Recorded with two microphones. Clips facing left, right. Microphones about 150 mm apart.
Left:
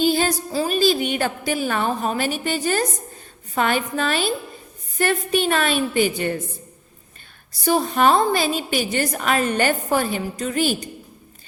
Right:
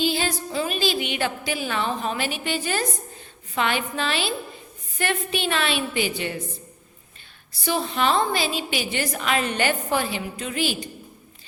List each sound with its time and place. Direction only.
0.0 s a woman's voice: 45° left (ahead or behind)
7.6 s a woman's voice: 45° left (ahead or behind)